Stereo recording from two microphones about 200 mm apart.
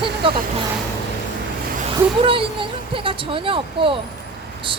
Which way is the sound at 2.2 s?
25° right (ahead or behind).